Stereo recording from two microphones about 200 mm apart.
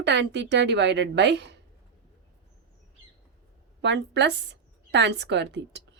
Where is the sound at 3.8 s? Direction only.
60° right (ahead or behind).